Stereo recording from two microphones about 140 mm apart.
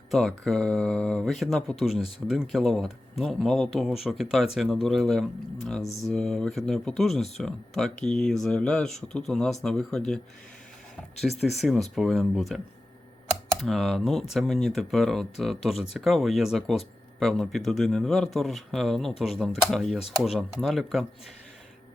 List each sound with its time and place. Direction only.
0.1 s speech: centre (ahead or behind)